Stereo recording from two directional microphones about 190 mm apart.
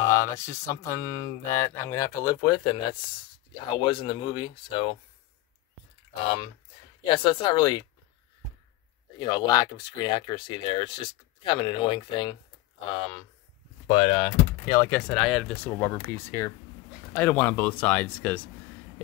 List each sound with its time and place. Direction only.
0.0 s speech: 15° left (ahead or behind)
7.1 s speech: 25° left (ahead or behind)
9.3 s speech: 20° left (ahead or behind)
13.8 s speech: 30° left (ahead or behind)
14.8 s speech: 10° left (ahead or behind)